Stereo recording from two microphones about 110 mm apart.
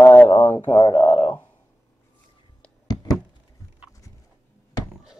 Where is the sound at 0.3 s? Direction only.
35° left (ahead or behind).